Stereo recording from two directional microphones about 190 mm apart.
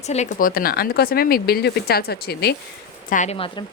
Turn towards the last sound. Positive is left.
turn(degrees=40)  # may be behind; listen again after turning